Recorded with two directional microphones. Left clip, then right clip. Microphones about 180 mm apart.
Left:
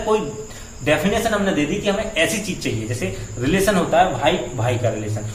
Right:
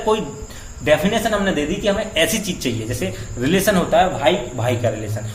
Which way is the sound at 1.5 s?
40° right (ahead or behind).